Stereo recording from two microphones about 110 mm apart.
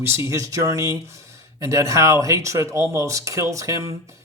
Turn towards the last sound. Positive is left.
turn(degrees=-30)  # may be behind; listen again after turning